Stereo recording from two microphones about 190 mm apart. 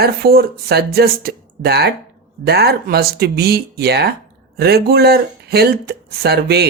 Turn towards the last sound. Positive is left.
turn(degrees=-55)  # may be behind; listen again after turning